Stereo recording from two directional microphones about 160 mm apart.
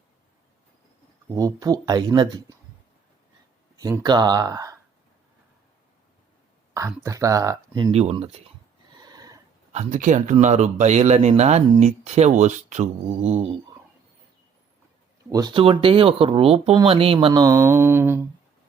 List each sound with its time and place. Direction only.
1.4 s speech: 20° right (ahead or behind)
3.8 s speech: 25° right (ahead or behind)
6.7 s speech: 20° right (ahead or behind)
7.9 s speech: 40° right (ahead or behind)
9.0 s a sound: 25° right (ahead or behind)
9.7 s speech: 50° right (ahead or behind)
15.3 s speech: 25° right (ahead or behind)
17.4 s mantra: 15° right (ahead or behind)